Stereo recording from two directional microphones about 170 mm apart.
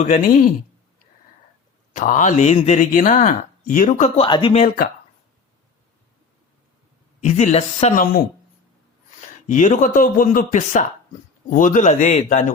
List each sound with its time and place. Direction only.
0.0 s speech: 50° left (ahead or behind)
1.9 s speech: 50° left (ahead or behind)
4.3 s speech: 25° left (ahead or behind)
7.2 s speech: 45° left (ahead or behind)
9.5 s speech: 45° left (ahead or behind)